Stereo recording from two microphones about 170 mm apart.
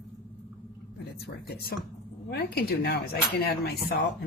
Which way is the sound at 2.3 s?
70° left (ahead or behind).